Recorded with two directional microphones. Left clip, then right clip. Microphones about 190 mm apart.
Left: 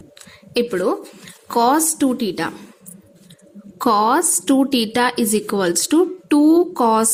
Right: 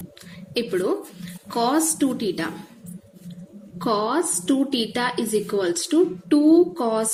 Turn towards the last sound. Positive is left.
turn(degrees=45)  # may be behind; listen again after turning